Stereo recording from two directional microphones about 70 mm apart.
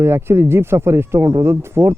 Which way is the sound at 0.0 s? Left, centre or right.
Right.